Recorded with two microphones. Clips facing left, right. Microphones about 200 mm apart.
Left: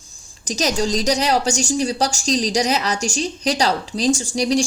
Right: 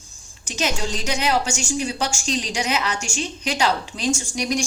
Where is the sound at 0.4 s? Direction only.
40° left (ahead or behind).